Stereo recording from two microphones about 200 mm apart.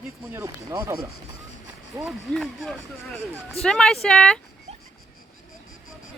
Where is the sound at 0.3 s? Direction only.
15° right (ahead or behind).